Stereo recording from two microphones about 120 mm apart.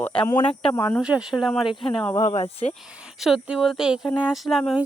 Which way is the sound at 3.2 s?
5° right (ahead or behind).